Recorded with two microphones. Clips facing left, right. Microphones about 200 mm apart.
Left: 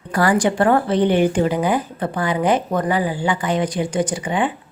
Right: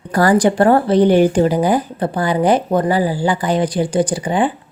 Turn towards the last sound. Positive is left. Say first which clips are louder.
# right 4 dB
turn(degrees=-35)  # may be behind; listen again after turning